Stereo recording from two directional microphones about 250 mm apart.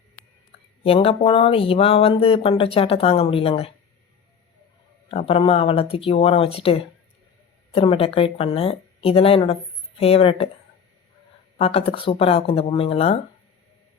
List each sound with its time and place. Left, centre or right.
0.9 s speech: left
5.1 s speech: left
11.5 s speech: left